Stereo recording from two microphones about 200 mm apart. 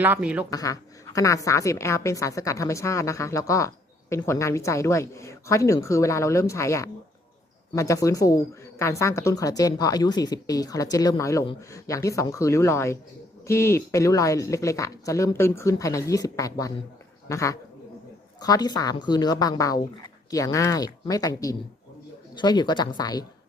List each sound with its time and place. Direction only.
0.0 s speech: 5° right (ahead or behind)
0.5 s a woman's voice: 15° left (ahead or behind)